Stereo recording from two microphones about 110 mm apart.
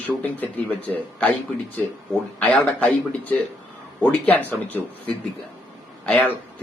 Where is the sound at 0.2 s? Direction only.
15° left (ahead or behind).